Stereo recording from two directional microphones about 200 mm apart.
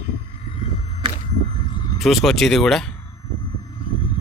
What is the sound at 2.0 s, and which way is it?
Speech, centre (ahead or behind).